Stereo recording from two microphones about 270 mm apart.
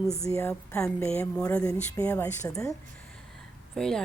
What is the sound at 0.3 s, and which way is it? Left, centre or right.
A woman's voice, centre.